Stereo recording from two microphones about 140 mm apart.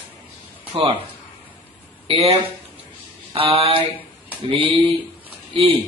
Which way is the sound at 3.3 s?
45° right (ahead or behind).